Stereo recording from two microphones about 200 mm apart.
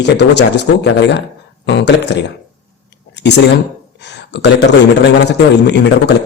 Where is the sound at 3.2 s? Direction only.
55° left (ahead or behind).